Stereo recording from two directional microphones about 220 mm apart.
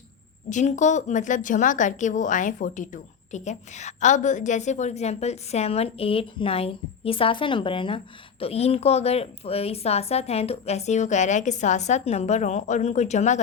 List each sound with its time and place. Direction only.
0.5 s speech: 35° left (ahead or behind)